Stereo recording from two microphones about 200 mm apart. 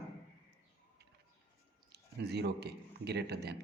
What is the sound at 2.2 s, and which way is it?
A man's voice, 55° right (ahead or behind).